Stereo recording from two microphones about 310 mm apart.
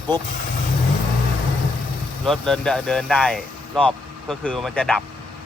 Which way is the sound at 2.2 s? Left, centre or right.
Centre.